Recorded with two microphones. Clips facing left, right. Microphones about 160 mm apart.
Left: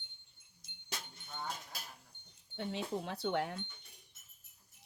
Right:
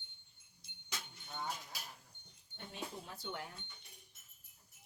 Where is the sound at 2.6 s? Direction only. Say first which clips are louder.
Left 9 dB; 90° left; by 3.6 s 70° left (ahead or behind).